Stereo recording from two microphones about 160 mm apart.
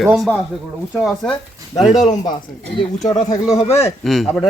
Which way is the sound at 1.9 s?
50° left (ahead or behind).